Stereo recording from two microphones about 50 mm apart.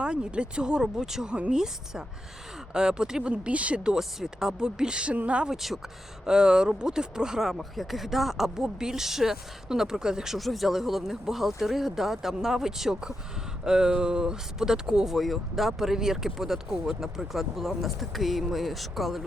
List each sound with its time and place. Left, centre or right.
0.0 s speech: centre
3.8 s speech: centre; by 5.5 s right
5.5 s speech: centre
7.6 s speech: centre
10.3 s speech: centre